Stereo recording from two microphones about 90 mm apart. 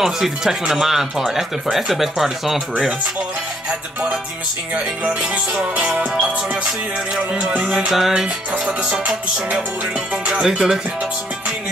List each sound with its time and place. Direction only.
0.0 s speech: 5° right (ahead or behind)
4.7 s music: 15° right (ahead or behind)
7.7 s music: 5° right (ahead or behind)